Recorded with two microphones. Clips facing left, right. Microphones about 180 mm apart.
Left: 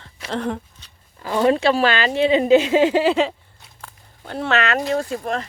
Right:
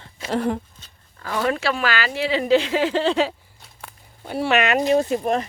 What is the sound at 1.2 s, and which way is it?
Speech, 20° left (ahead or behind).